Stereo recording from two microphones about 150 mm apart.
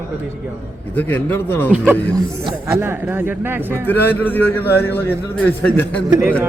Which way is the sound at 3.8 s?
10° left (ahead or behind).